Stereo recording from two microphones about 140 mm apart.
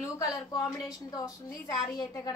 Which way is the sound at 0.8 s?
25° left (ahead or behind).